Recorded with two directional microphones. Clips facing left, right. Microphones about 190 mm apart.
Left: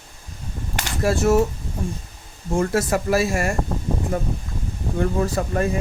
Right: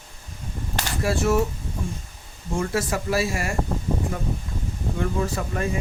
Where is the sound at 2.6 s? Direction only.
50° left (ahead or behind).